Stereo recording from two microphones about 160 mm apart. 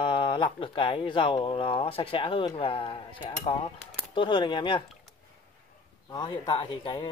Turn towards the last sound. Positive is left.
turn(degrees=30)  # may be behind; listen again after turning